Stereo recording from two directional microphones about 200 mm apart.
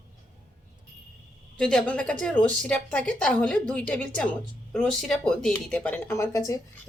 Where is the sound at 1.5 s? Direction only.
5° left (ahead or behind).